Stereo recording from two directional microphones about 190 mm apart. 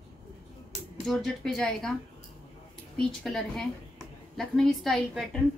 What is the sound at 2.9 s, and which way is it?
A woman's voice, centre (ahead or behind).